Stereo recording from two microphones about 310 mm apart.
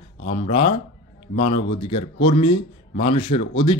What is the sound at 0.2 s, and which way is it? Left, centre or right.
Speech, left.